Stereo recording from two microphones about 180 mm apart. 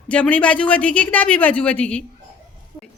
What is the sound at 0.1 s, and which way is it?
A woman's voice, 5° left (ahead or behind).